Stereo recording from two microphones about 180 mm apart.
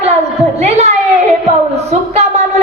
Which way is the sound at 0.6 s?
35° right (ahead or behind).